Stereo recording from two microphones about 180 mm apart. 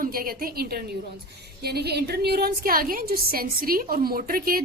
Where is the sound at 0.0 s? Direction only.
50° right (ahead or behind).